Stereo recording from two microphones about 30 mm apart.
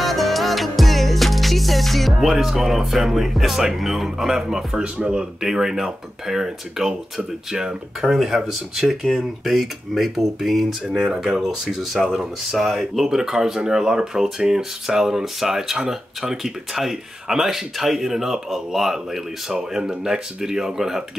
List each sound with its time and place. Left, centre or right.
0.0 s music: centre
2.1 s speech: centre
8.0 s speech: centre
9.4 s speech: centre
10.9 s speech: centre
11.8 s speech: centre
19.5 s speech: right